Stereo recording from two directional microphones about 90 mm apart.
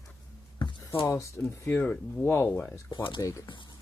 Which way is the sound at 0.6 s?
55° left (ahead or behind).